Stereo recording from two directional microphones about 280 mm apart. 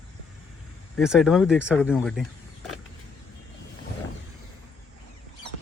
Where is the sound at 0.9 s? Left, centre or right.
Centre.